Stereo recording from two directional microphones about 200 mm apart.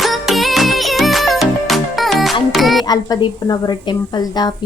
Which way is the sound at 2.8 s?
20° left (ahead or behind).